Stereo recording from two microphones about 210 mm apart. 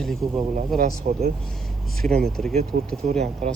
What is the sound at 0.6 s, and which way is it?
Speech, 40° right (ahead or behind).